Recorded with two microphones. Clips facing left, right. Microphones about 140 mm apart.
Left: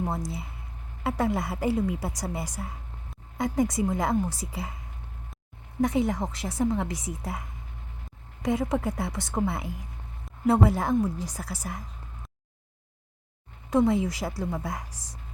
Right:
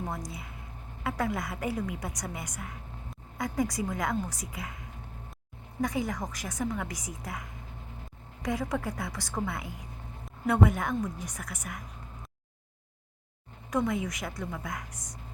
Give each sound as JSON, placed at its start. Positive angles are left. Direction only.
{"t": 1.0, "sound": "a woman's voice", "side_deg": 30}
{"t": 5.8, "sound": "a woman's voice", "side_deg": 25}
{"t": 13.7, "sound": "speech", "side_deg": 30}